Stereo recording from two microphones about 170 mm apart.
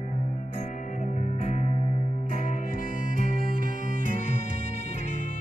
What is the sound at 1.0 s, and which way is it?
Music, 40° left (ahead or behind).